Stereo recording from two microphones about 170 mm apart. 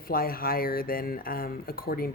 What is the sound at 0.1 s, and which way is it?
Speech, 60° left (ahead or behind).